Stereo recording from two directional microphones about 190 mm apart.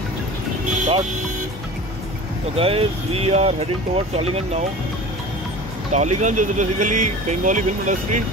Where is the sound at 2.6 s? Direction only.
30° right (ahead or behind).